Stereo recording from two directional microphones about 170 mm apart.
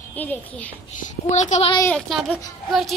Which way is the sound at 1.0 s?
45° left (ahead or behind).